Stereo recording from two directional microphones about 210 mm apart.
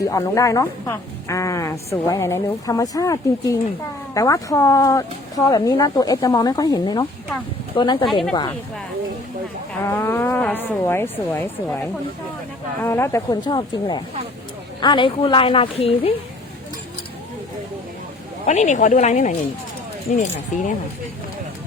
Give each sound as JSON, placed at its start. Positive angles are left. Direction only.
{"t": 0.0, "sound": "a woman's voice", "side_deg": 15}
{"t": 9.8, "sound": "a woman's voice", "side_deg": 10}
{"t": 12.8, "sound": "a woman's voice", "side_deg": 10}
{"t": 18.4, "sound": "speech", "side_deg": 35}